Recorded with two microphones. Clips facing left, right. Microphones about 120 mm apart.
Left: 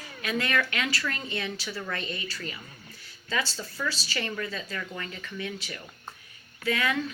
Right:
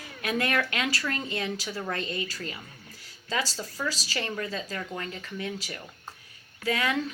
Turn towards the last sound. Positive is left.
turn(degrees=-35)  # may be behind; listen again after turning